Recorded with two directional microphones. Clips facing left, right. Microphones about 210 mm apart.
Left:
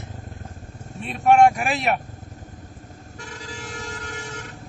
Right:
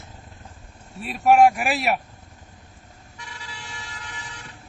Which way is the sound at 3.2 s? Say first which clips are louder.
Left 6 dB; 45° left (ahead or behind).